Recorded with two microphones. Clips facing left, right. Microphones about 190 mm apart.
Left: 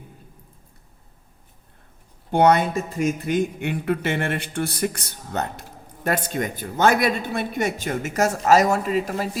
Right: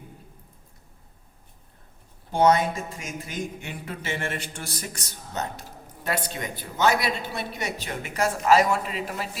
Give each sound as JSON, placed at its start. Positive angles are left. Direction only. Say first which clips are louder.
{"t": 2.3, "sound": "a man's voice", "louder": "left 3 dB", "side_deg": 60}